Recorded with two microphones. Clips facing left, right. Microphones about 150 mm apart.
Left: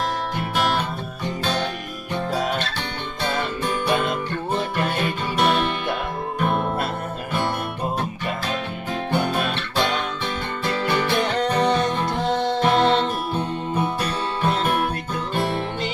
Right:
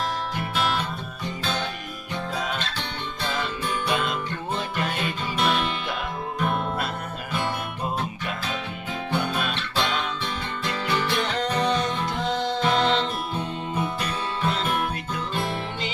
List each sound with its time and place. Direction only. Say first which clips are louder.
0.5 s music: left 4 dB; 45° left (ahead or behind)
2.3 s music: left 5 dB; 45° left (ahead or behind)
9.1 s music: left 3 dB; 50° left (ahead or behind)
11.5 s music: left 3 dB; 40° left (ahead or behind)
11.8 s music: left 4 dB; 55° left (ahead or behind)